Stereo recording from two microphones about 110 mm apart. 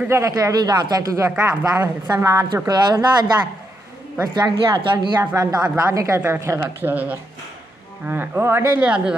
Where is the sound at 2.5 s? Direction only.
40° right (ahead or behind).